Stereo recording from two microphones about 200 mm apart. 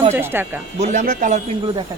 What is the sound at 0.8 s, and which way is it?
Speech, 40° right (ahead or behind).